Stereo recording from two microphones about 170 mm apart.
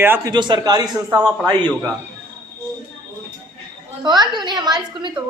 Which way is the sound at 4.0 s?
25° right (ahead or behind).